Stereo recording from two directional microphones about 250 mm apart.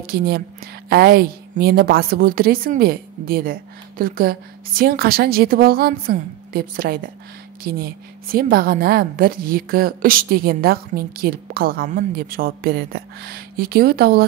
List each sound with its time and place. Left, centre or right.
0.0 s a woman's voice: right